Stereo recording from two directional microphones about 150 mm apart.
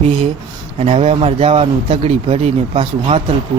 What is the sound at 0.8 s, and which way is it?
Speech, 40° right (ahead or behind).